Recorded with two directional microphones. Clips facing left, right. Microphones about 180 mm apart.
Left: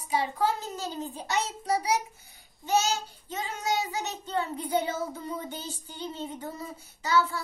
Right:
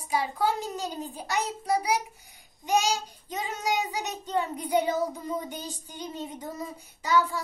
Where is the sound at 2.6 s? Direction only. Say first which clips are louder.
Right 1 dB; 15° right (ahead or behind).